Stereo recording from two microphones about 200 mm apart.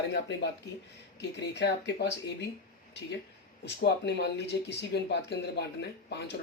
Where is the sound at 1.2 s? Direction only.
60° left (ahead or behind).